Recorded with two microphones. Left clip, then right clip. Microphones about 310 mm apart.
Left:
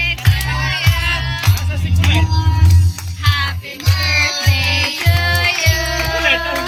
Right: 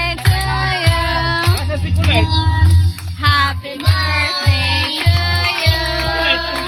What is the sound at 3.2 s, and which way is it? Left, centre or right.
Music, centre.